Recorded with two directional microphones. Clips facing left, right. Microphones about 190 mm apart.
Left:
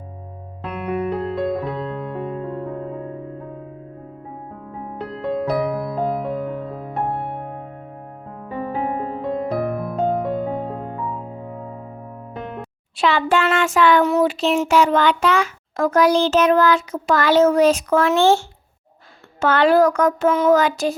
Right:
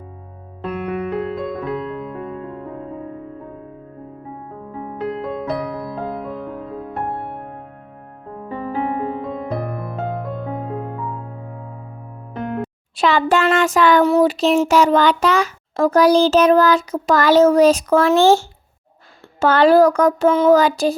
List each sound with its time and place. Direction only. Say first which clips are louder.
0.6 s music: even; centre (ahead or behind)
5.5 s music: left 3 dB; centre (ahead or behind)
8.4 s music: right 1 dB; centre (ahead or behind)
12.3 s music: right 7 dB; centre (ahead or behind)
13.0 s speech: right 2 dB; 40° right (ahead or behind)